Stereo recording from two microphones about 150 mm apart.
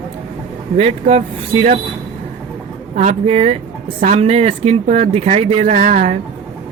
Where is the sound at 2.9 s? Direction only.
50° right (ahead or behind).